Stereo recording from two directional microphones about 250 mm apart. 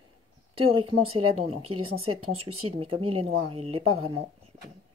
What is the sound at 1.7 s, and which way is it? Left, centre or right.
Speech, right.